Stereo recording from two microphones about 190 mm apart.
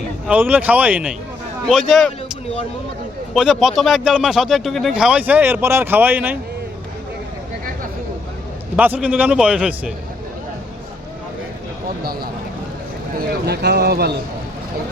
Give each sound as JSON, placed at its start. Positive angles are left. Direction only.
{"t": 0.3, "sound": "speech", "side_deg": -10}
{"t": 3.3, "sound": "speech", "side_deg": 0}
{"t": 8.7, "sound": "speech", "side_deg": -5}
{"t": 13.4, "sound": "speech", "side_deg": -60}